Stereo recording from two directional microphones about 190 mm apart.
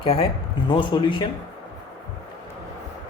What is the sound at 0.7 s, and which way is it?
Speech, 25° left (ahead or behind).